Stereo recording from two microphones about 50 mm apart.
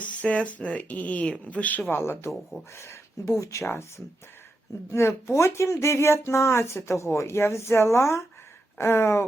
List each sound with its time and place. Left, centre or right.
0.0 s speech: left
1.9 s speech: left
3.7 s speech: left